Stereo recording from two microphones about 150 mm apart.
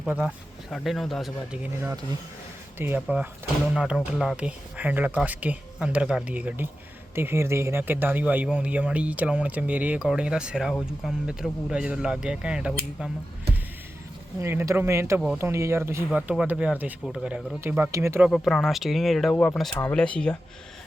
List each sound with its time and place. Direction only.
0.0 s speech: 5° right (ahead or behind)
2.7 s speech: 15° right (ahead or behind)
14.4 s speech: 20° right (ahead or behind)
16.0 s speech: 5° right (ahead or behind)
18.3 s speech: 5° left (ahead or behind)
19.3 s speech: 10° left (ahead or behind)